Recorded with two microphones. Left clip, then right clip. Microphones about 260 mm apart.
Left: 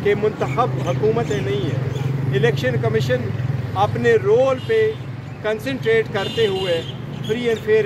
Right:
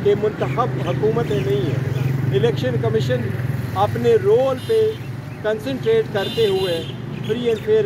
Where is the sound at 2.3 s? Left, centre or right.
Centre.